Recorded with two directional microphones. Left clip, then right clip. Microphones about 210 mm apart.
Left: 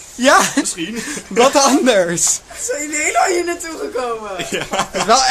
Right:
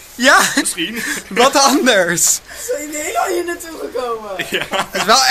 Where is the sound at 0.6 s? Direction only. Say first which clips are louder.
Right 3 dB; 40° left (ahead or behind).